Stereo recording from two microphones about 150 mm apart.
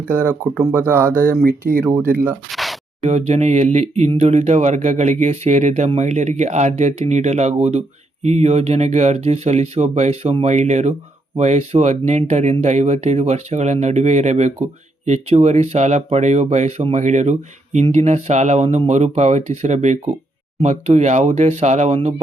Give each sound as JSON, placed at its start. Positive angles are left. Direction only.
{"t": 0.9, "sound": "speech", "side_deg": -15}
{"t": 1.1, "sound": "speech", "side_deg": 15}
{"t": 1.8, "sound": "speech", "side_deg": -15}
{"t": 2.5, "sound": "a sound", "side_deg": 0}
{"t": 3.0, "sound": "speech", "side_deg": -45}